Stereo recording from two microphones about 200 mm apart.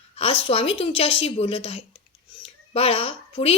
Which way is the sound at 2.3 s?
30° left (ahead or behind).